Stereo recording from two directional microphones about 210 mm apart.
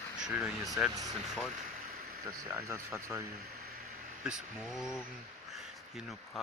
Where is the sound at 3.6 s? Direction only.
45° right (ahead or behind).